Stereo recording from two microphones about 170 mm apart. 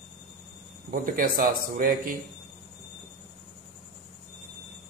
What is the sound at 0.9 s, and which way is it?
Speech, 55° right (ahead or behind).